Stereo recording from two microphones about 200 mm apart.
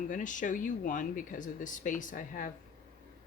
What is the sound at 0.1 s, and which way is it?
Speech, 40° left (ahead or behind).